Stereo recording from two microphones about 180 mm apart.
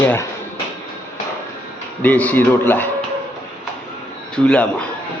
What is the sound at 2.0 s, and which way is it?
Speech, 10° left (ahead or behind).